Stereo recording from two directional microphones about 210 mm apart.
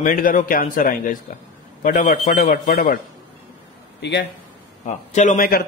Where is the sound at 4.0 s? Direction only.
55° left (ahead or behind).